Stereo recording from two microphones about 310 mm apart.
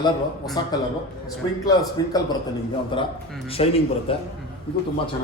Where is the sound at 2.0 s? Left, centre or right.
Centre.